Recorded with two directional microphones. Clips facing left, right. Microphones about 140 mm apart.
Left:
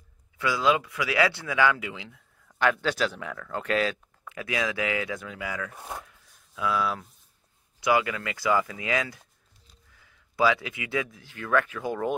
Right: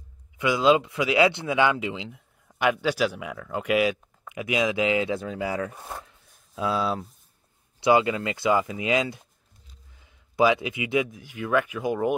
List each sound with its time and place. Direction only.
0.4 s speech: 20° right (ahead or behind)
6.0 s chopping: 30° right (ahead or behind)
7.8 s speech: 25° right (ahead or behind)